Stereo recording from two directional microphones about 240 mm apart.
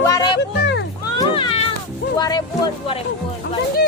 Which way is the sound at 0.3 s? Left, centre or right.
Left.